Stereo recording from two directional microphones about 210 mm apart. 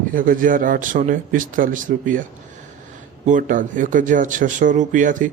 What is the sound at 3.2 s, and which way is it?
A man's voice, 40° right (ahead or behind).